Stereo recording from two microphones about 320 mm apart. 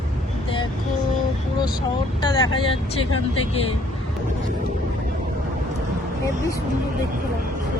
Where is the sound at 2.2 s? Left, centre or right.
Centre.